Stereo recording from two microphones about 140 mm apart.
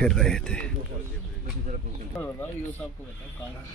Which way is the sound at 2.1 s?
10° left (ahead or behind).